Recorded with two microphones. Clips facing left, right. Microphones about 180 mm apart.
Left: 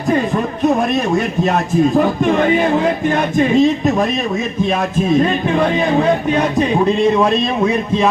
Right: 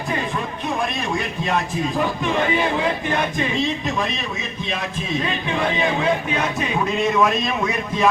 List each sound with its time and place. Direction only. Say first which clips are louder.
1.5 s speech: left 8 dB; 45° left (ahead or behind)
5.0 s speech: left 10 dB; 45° left (ahead or behind); by 8.0 s 30° left (ahead or behind)